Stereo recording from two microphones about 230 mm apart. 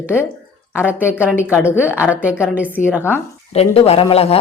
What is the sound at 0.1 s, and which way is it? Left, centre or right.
Speech, centre.